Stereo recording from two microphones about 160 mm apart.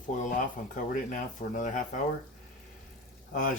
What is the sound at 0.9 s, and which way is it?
Speech, 55° left (ahead or behind).